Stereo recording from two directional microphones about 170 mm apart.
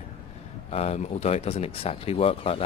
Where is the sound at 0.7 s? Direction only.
40° left (ahead or behind).